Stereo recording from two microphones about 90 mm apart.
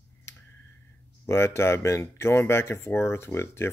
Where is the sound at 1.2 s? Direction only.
30° left (ahead or behind).